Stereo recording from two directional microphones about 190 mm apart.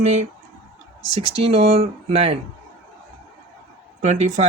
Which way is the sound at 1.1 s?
30° right (ahead or behind).